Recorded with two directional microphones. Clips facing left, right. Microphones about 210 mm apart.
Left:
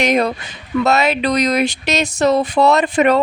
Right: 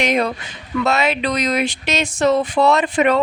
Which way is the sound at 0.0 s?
40° left (ahead or behind).